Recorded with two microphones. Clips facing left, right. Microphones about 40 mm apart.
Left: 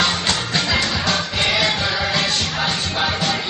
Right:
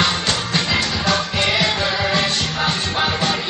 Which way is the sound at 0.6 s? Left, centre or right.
Centre.